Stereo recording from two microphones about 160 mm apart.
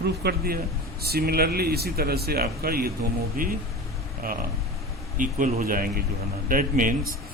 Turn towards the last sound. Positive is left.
turn(degrees=-60)  # may be behind; listen again after turning